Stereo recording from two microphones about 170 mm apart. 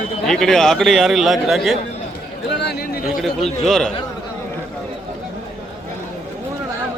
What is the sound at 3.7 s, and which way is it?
Speech, centre (ahead or behind).